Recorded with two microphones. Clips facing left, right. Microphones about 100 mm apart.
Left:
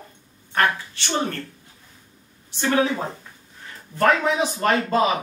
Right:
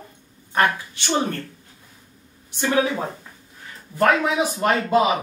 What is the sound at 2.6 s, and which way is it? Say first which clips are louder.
Speech: even; 10° right (ahead or behind).